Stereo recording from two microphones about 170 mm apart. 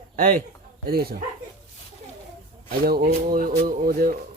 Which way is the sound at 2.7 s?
60° right (ahead or behind).